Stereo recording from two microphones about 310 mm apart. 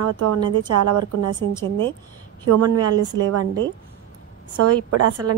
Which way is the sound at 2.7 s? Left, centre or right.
Centre.